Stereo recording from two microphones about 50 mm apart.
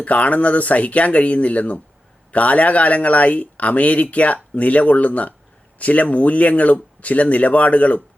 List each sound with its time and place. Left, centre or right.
0.0 s speech: left